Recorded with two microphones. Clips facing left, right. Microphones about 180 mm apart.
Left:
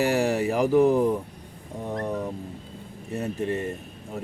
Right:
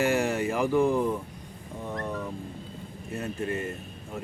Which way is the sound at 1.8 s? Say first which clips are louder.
Left 4 dB; 20° left (ahead or behind).